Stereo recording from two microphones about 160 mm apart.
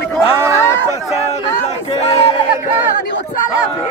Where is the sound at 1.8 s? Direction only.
35° left (ahead or behind).